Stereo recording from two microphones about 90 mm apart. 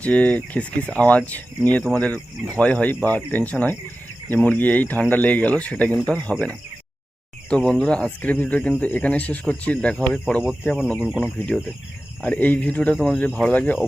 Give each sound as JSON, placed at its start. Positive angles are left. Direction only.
{"t": 0.0, "sound": "speech", "side_deg": 15}
{"t": 7.5, "sound": "speech", "side_deg": 10}
{"t": 11.0, "sound": "speech", "side_deg": -5}
{"t": 12.2, "sound": "speech", "side_deg": 15}